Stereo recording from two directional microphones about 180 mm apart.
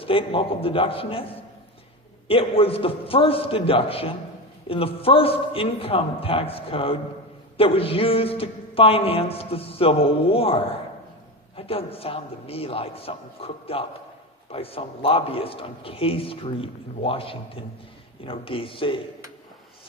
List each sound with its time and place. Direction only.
0.0 s a man's voice: 30° left (ahead or behind)